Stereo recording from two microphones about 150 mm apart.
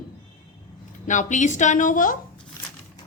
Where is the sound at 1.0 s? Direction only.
55° left (ahead or behind).